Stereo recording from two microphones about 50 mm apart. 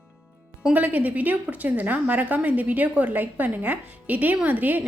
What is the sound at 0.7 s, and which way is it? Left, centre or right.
A woman's voice, right.